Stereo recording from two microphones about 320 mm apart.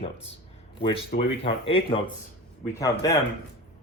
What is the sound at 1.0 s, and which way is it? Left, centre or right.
Speech, left.